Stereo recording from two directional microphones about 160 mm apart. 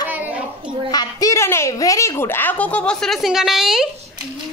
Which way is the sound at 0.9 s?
20° left (ahead or behind).